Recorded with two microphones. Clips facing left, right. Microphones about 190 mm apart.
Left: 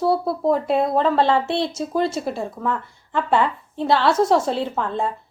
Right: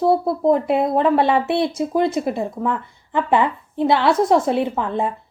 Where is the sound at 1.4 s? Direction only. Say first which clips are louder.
Right 4 dB; 55° right (ahead or behind).